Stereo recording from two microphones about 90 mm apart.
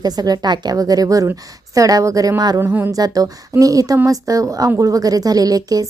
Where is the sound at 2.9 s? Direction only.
45° right (ahead or behind).